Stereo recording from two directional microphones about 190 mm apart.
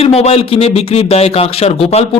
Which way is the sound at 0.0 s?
35° left (ahead or behind).